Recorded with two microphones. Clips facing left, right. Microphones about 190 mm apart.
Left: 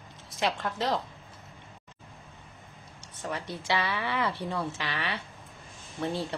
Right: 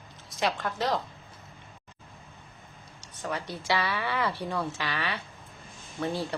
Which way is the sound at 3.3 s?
25° left (ahead or behind).